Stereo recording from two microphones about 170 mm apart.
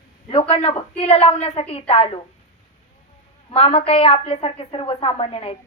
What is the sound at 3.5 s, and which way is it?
A woman's voice, 35° left (ahead or behind).